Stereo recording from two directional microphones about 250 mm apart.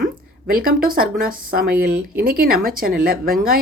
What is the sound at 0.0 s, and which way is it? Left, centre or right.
Speech, right.